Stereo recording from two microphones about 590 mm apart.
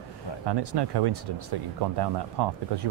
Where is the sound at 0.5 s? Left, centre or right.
Right.